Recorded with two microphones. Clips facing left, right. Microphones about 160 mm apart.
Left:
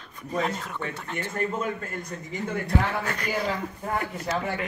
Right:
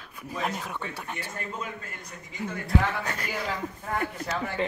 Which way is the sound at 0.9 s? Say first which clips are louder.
Left 3 dB; 10° right (ahead or behind).